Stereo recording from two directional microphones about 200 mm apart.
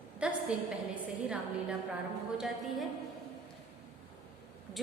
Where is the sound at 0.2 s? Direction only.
5° right (ahead or behind).